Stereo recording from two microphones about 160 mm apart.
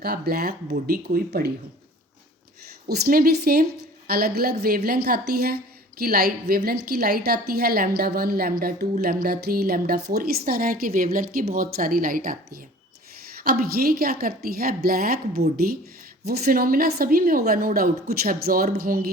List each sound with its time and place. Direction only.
0.0 s a woman's voice: 75° right (ahead or behind)
2.8 s a woman's voice: 70° right (ahead or behind)
13.4 s a woman's voice: 70° right (ahead or behind)